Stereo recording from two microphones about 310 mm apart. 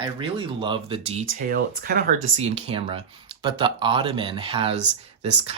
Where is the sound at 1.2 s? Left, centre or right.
Right.